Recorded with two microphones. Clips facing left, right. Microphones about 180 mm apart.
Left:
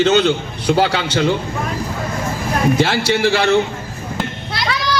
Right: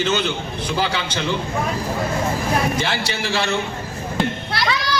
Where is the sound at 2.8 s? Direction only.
70° left (ahead or behind).